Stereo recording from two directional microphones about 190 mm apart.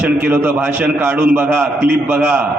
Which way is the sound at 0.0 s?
10° right (ahead or behind).